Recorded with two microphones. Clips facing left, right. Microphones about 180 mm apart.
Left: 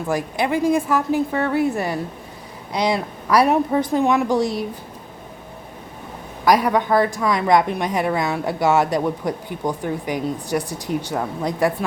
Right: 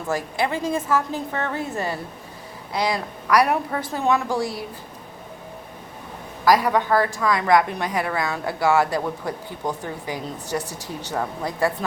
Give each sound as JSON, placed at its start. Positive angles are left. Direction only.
{"t": 0.1, "sound": "a woman's voice", "side_deg": 15}
{"t": 6.4, "sound": "a woman's voice", "side_deg": 15}